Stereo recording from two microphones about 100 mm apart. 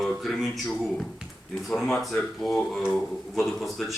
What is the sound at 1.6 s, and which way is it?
Mantra, centre (ahead or behind).